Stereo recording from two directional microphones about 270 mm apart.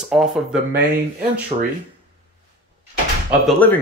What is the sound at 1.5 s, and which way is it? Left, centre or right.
Speech, right.